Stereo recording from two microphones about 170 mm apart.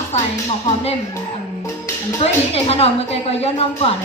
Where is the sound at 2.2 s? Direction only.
35° left (ahead or behind).